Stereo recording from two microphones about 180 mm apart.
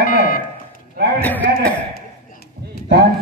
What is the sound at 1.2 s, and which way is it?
Speech, 10° left (ahead or behind).